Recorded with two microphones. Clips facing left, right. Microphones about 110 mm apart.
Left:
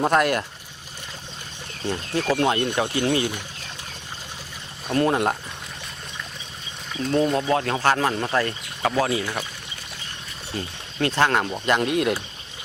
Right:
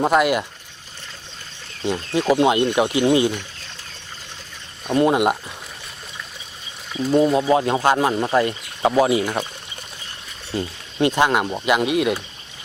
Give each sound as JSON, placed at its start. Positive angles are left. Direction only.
{"t": 0.0, "sound": "speech", "side_deg": -5}
{"t": 1.8, "sound": "speech", "side_deg": -15}
{"t": 4.9, "sound": "speech", "side_deg": -10}
{"t": 6.9, "sound": "speech", "side_deg": -10}
{"t": 11.0, "sound": "speech", "side_deg": -15}